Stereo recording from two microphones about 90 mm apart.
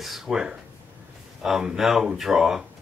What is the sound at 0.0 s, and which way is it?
Speech, 5° right (ahead or behind).